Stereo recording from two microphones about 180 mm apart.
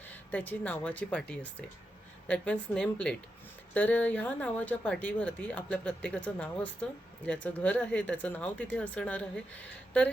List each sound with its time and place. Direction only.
0.1 s speech: 10° left (ahead or behind)